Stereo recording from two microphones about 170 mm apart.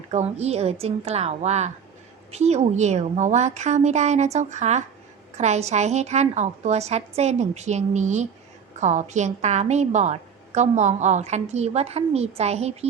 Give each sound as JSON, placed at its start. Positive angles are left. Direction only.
{"t": 0.1, "sound": "a woman's voice", "side_deg": -40}